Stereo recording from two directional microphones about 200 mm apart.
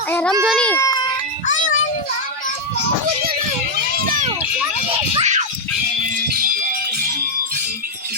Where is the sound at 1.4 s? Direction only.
40° left (ahead or behind).